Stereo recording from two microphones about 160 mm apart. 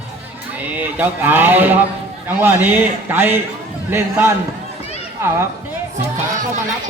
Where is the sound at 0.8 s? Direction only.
10° right (ahead or behind).